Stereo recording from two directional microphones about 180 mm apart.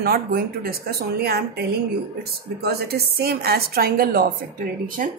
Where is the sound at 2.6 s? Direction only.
60° right (ahead or behind).